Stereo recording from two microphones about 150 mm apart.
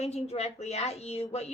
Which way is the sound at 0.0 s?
45° left (ahead or behind).